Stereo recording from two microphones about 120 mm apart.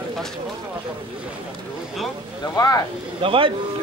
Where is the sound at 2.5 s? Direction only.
25° left (ahead or behind).